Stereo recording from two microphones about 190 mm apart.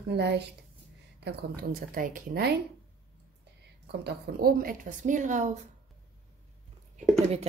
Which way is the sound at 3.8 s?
60° right (ahead or behind).